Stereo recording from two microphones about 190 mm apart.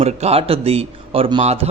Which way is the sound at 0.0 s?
35° right (ahead or behind).